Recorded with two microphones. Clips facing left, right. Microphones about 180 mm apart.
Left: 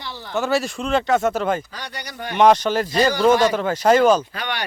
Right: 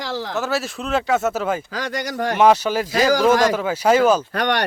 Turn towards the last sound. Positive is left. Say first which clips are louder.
# right 8 dB
turn(degrees=-65)  # may be behind; listen again after turning